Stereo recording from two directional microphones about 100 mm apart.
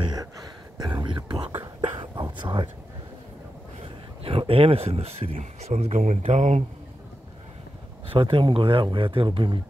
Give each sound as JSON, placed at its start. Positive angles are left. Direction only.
{"t": 0.0, "sound": "a sound", "side_deg": -40}
{"t": 1.8, "sound": "whispering", "side_deg": -50}
{"t": 3.8, "sound": "speech", "side_deg": -70}
{"t": 8.1, "sound": "speech", "side_deg": -60}